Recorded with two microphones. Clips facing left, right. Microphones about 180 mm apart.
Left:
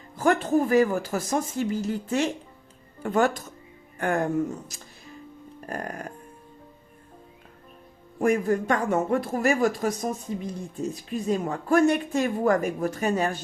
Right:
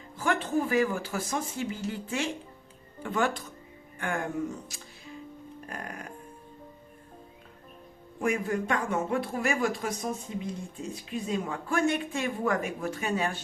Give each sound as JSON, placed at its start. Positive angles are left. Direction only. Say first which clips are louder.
{"t": 0.2, "sound": "speech", "louder": "left 6 dB", "side_deg": 45}
{"t": 5.6, "sound": "speech", "louder": "left 8 dB", "side_deg": 45}
{"t": 8.2, "sound": "speech", "louder": "left 6 dB", "side_deg": 45}